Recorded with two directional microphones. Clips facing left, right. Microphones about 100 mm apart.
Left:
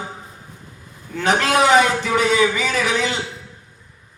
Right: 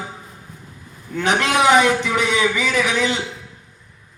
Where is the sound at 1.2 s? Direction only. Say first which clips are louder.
Left 1 dB; 35° left (ahead or behind).